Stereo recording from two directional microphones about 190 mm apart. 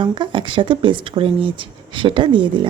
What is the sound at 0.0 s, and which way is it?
Speech, 25° right (ahead or behind).